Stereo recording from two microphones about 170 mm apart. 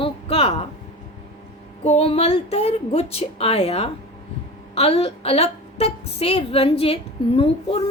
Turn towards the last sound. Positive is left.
turn(degrees=35)  # may be behind; listen again after turning